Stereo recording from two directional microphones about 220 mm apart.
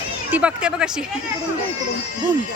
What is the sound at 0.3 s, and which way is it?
Speech, 5° right (ahead or behind).